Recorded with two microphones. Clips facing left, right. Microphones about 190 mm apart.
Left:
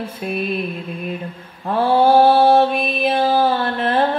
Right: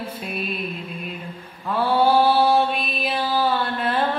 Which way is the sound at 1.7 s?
45° left (ahead or behind).